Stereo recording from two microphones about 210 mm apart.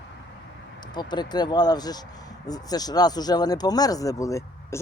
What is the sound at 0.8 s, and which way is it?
Speech, 20° left (ahead or behind).